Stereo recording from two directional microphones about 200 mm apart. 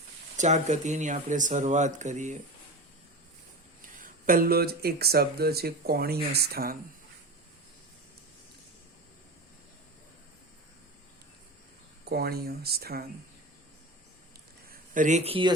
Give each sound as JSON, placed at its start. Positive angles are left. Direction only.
{"t": 0.3, "sound": "speech", "side_deg": -35}
{"t": 4.0, "sound": "speech", "side_deg": -45}
{"t": 12.0, "sound": "speech", "side_deg": -50}
{"t": 14.7, "sound": "a man's voice", "side_deg": -40}